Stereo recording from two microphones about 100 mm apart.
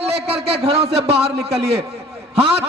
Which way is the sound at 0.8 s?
90° right.